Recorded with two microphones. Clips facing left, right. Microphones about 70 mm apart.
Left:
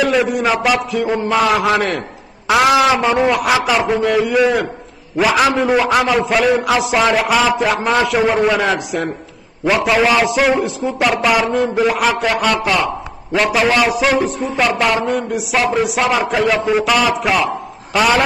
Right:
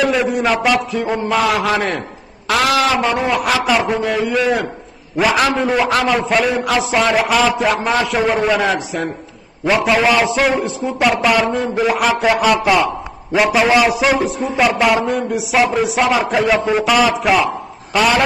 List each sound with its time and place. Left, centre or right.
0.0 s a man's voice: centre
2.4 s a sound: centre
2.8 s a man's voice: centre